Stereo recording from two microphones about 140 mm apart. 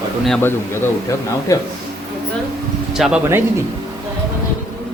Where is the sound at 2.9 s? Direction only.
5° right (ahead or behind).